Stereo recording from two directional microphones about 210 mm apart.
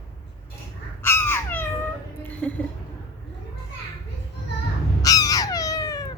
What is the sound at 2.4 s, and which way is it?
Speech, 10° left (ahead or behind).